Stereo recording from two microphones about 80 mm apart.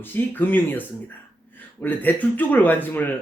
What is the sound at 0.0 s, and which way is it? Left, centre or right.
Speech, left.